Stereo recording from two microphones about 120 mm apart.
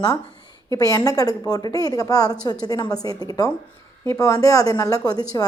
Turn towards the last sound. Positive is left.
turn(degrees=30)  # may be behind; listen again after turning